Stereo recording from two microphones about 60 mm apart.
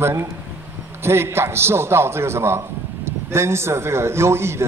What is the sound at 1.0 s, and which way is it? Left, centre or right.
A man's voice, right.